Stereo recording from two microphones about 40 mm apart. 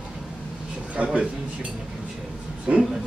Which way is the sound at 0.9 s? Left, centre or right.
Right.